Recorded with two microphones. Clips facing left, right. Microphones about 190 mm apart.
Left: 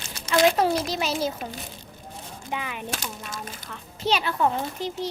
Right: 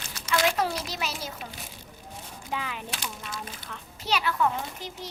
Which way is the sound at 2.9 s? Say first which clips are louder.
Left 3 dB; 45° left (ahead or behind).